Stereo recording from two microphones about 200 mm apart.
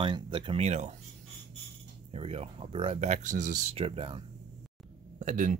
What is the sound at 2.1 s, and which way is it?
Speech, 30° right (ahead or behind).